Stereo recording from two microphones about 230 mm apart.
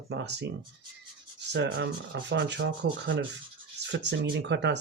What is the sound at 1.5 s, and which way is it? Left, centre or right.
Speech, right.